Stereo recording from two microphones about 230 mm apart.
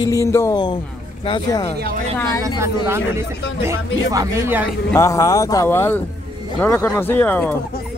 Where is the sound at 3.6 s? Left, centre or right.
Centre.